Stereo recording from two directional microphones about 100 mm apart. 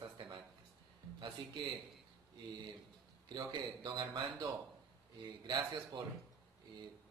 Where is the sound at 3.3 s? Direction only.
50° right (ahead or behind).